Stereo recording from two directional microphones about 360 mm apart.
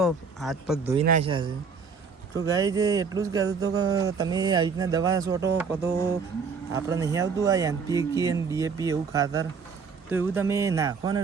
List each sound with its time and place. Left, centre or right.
0.0 s speech: centre
0.9 s speech: centre